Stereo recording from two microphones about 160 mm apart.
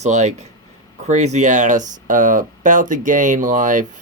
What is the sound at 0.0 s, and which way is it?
Speech, 45° right (ahead or behind).